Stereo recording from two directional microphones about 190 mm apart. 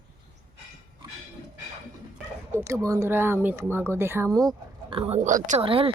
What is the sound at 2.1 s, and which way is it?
Speech, 10° right (ahead or behind).